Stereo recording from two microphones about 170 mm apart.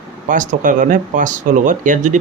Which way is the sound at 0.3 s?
50° right (ahead or behind).